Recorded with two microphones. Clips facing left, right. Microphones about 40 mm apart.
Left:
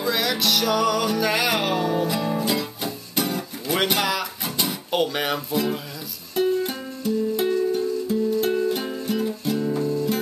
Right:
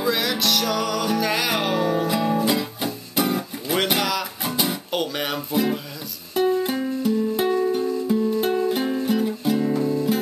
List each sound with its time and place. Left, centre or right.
0.0 s music: centre
3.7 s a sound: centre
4.4 s music: centre
4.9 s music: centre
5.5 s music: centre
9.8 s music: right